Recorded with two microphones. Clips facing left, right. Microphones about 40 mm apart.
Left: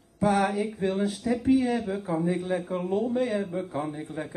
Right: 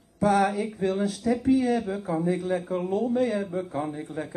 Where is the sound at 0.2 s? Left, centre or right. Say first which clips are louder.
Right 2 dB; centre.